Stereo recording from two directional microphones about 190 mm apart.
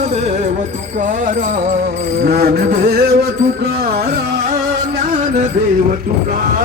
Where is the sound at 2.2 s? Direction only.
55° right (ahead or behind).